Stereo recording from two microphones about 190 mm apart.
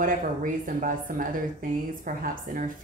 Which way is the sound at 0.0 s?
45° right (ahead or behind).